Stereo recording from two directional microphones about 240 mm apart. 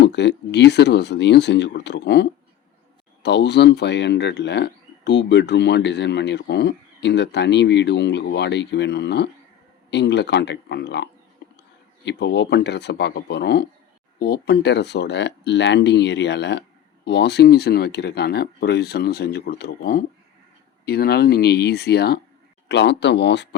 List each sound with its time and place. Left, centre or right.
0.0 s speech: left
3.2 s speech: left